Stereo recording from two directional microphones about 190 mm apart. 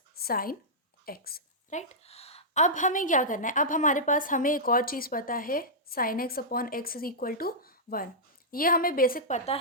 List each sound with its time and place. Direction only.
0.2 s a woman's voice: 50° left (ahead or behind)
1.0 s a sound: 50° left (ahead or behind)
1.8 s a woman's voice: 35° left (ahead or behind)